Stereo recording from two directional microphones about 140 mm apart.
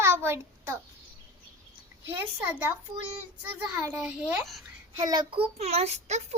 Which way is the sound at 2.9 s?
30° right (ahead or behind).